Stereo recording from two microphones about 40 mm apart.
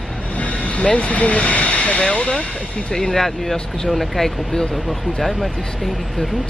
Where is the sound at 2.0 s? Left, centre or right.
Left.